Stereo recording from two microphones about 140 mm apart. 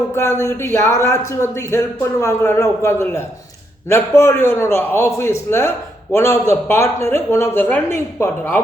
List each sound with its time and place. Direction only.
0.1 s a man's voice: 20° left (ahead or behind)